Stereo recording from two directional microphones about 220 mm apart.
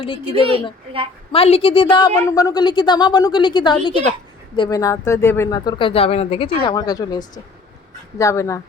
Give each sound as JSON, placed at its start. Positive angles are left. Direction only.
{"t": 0.0, "sound": "a woman's voice", "side_deg": 25}